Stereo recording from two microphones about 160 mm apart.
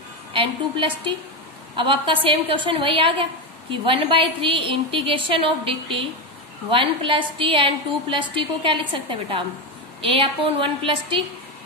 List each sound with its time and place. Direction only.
0.3 s a woman's voice: 35° right (ahead or behind)